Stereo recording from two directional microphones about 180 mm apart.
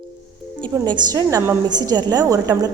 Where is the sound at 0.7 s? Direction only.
25° right (ahead or behind).